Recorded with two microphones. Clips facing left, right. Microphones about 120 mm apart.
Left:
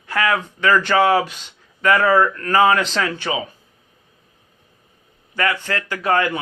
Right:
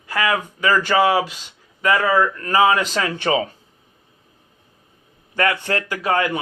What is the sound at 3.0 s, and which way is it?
Speech, 20° right (ahead or behind).